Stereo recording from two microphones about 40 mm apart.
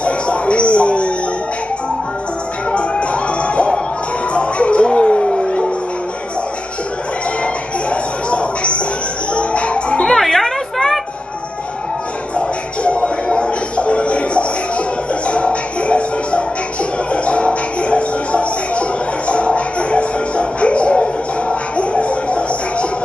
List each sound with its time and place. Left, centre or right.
0.0 s music: left
2.7 s music: left
7.9 s a sound: left
9.3 s music: left
10.0 s a sound: centre
12.4 s music: left